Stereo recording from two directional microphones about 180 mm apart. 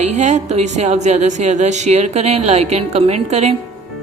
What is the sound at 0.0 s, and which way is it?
A woman's voice, 40° right (ahead or behind).